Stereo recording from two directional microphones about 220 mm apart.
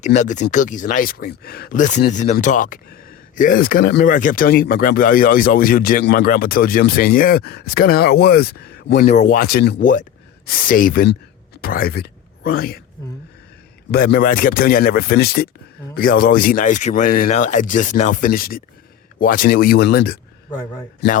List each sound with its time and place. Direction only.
0.0 s speech: 30° left (ahead or behind)
9.0 s speech: 35° left (ahead or behind)
13.9 s speech: 45° left (ahead or behind)